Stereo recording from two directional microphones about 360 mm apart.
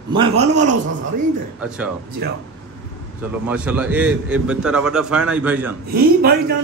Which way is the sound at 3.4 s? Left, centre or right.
Centre.